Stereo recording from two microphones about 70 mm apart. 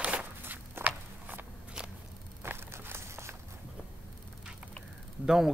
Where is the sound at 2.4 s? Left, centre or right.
Right.